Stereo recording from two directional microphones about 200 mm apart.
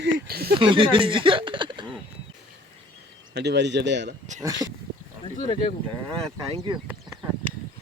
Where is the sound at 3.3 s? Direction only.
60° right (ahead or behind).